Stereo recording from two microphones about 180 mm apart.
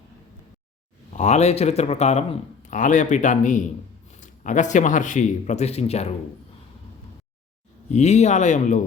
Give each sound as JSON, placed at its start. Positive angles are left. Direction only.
{"t": 1.1, "sound": "a man's voice", "side_deg": 40}
{"t": 7.9, "sound": "a man's voice", "side_deg": 40}